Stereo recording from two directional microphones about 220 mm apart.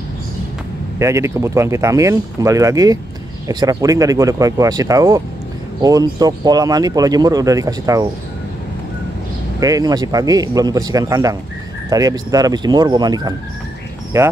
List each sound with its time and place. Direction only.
0.9 s speech: 15° right (ahead or behind)
9.6 s speech: 15° right (ahead or behind)